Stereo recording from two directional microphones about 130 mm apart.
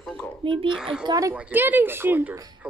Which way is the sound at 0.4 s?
45° right (ahead or behind).